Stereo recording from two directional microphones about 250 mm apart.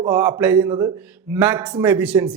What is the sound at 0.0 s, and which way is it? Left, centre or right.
Speech, centre.